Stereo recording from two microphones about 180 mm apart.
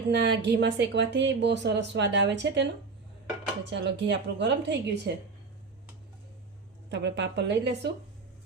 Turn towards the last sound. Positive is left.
turn(degrees=-75)  # may be behind; listen again after turning